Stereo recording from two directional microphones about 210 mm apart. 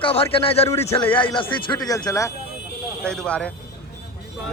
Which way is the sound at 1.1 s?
25° left (ahead or behind).